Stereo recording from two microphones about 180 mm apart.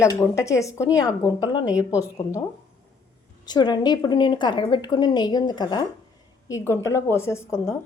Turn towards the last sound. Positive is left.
turn(degrees=15)  # may be behind; listen again after turning